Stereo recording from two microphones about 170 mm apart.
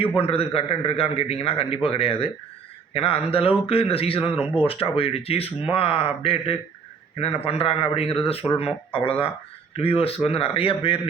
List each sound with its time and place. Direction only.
0.2 s a man's voice: 35° left (ahead or behind)